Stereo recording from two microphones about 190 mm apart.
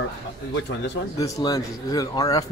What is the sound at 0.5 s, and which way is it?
Speech, 65° left (ahead or behind).